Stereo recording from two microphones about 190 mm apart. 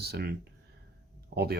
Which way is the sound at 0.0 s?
55° right (ahead or behind).